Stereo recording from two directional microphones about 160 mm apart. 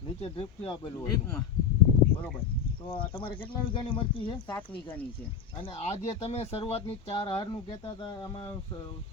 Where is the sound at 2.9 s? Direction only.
35° left (ahead or behind).